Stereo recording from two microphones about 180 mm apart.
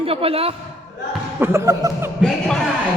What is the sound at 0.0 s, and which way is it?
Speech, 30° right (ahead or behind).